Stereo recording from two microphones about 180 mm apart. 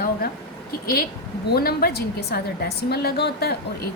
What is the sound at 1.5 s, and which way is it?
A woman's voice, 60° left (ahead or behind).